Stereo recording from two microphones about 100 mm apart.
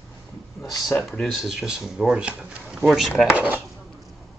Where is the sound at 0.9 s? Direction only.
5° left (ahead or behind).